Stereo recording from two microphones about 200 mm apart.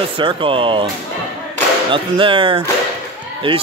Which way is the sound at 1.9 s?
25° right (ahead or behind).